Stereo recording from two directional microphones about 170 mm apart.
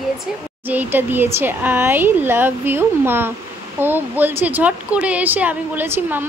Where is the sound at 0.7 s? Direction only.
10° right (ahead or behind).